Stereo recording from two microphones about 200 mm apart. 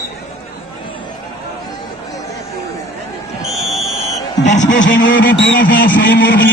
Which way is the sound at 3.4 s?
Centre (ahead or behind).